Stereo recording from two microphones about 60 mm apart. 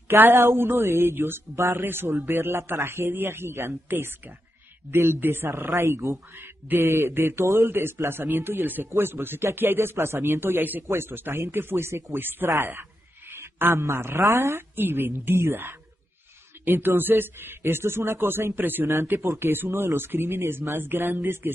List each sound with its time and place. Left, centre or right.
0.1 s a woman's voice: right
13.3 s a sound: right
13.9 s a woman's voice: right
14.8 s speech: right